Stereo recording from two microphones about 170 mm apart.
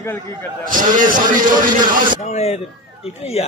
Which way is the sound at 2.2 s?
40° left (ahead or behind).